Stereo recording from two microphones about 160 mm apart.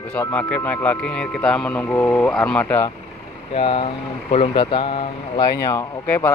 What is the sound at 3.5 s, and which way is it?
Speech, 35° left (ahead or behind).